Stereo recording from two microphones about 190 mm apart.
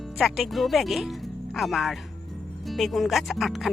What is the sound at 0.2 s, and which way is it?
Speech, centre (ahead or behind).